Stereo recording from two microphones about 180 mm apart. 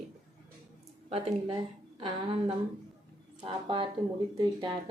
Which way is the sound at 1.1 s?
35° right (ahead or behind).